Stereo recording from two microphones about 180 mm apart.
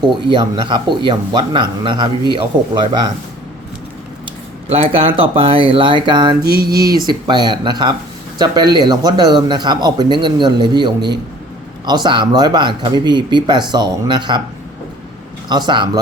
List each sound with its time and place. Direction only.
0.0 s speech: 25° right (ahead or behind)
4.7 s speech: 30° right (ahead or behind)
6.4 s mantra: 60° right (ahead or behind)
7.3 s speech: 25° right (ahead or behind)
15.4 s speech: 25° right (ahead or behind)